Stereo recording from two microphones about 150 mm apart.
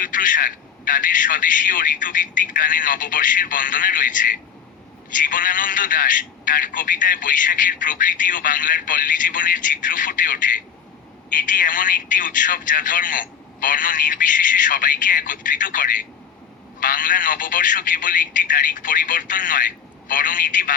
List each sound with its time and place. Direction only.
0.0 s speech: 65° left (ahead or behind)